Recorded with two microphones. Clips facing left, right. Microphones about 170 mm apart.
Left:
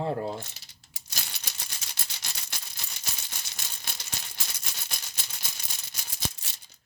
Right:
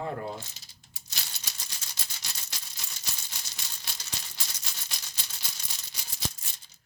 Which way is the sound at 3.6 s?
45° left (ahead or behind).